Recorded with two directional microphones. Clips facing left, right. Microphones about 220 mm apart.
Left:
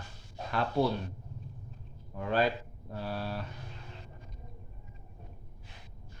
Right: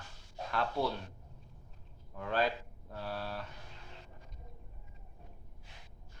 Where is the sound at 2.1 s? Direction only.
10° left (ahead or behind).